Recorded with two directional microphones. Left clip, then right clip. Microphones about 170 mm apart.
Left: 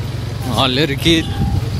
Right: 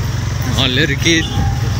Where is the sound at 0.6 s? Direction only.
25° left (ahead or behind).